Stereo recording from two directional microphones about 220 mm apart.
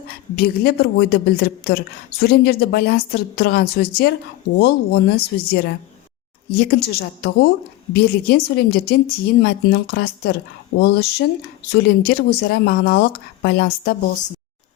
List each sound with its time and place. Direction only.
0.3 s speech: 45° left (ahead or behind)